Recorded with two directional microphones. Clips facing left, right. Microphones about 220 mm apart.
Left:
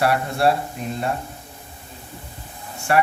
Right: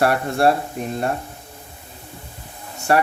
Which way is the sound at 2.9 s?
40° right (ahead or behind).